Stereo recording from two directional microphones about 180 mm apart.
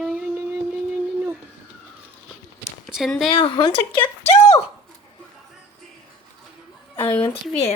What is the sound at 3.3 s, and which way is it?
Speech, 30° left (ahead or behind).